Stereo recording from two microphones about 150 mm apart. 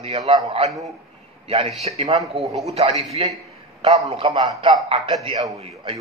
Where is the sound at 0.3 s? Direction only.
30° right (ahead or behind).